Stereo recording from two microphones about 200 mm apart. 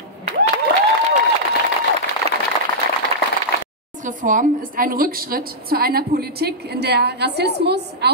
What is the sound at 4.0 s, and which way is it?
A woman's voice, 40° right (ahead or behind).